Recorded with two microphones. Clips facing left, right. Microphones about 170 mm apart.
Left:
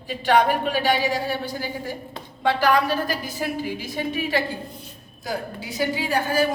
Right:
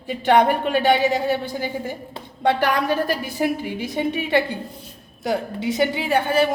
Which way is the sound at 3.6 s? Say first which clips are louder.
Right 4 dB; 60° right (ahead or behind).